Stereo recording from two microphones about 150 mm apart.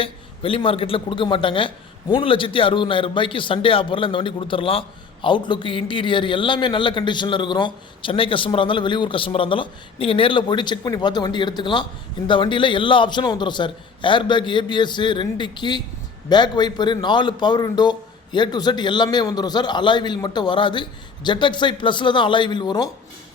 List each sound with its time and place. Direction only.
0.0 s a man's voice: 40° left (ahead or behind)